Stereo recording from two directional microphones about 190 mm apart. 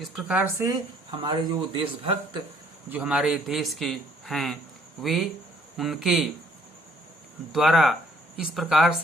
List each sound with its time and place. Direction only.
0.0 s speech: 5° right (ahead or behind)
1.2 s speech: 25° right (ahead or behind)
2.9 s a man's voice: 5° right (ahead or behind)
7.5 s a man's voice: centre (ahead or behind)